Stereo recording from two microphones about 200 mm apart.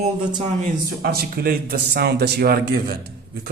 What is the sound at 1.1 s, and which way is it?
A man's voice, 50° right (ahead or behind).